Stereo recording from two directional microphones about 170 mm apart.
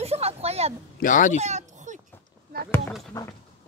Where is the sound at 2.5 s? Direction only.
60° right (ahead or behind).